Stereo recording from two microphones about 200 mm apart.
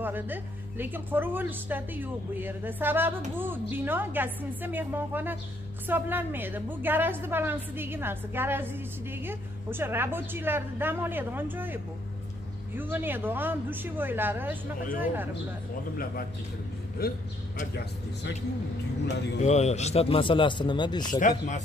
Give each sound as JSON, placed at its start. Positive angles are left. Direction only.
{"t": 0.0, "sound": "a woman's voice", "side_deg": -10}
{"t": 17.0, "sound": "a man's voice", "side_deg": 50}
{"t": 19.4, "sound": "a man's voice", "side_deg": 35}
{"t": 21.1, "sound": "speech", "side_deg": 40}